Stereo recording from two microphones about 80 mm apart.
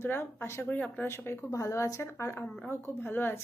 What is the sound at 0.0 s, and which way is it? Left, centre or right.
Speech, left.